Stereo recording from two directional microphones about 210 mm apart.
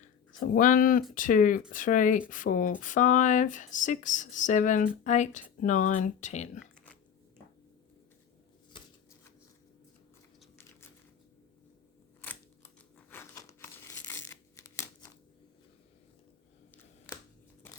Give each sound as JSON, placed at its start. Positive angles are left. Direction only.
{"t": 0.3, "sound": "speech", "side_deg": 40}
{"t": 8.7, "sound": "scissors", "side_deg": 20}
{"t": 12.2, "sound": "crumpling", "side_deg": 10}
{"t": 14.1, "sound": "a sound", "side_deg": 15}